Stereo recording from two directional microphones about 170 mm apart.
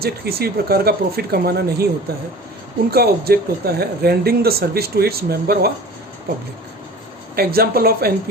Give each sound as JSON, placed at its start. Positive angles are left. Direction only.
{"t": 0.0, "sound": "speech", "side_deg": -65}
{"t": 2.9, "sound": "speech", "side_deg": -65}
{"t": 7.3, "sound": "speech", "side_deg": -65}